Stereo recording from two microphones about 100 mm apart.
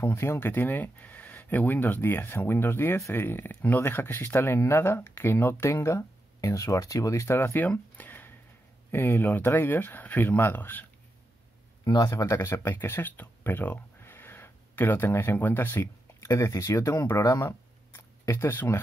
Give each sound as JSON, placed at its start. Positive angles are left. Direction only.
{"t": 0.0, "sound": "speech", "side_deg": 25}
{"t": 11.8, "sound": "speech", "side_deg": 45}
{"t": 12.1, "sound": "speech", "side_deg": 30}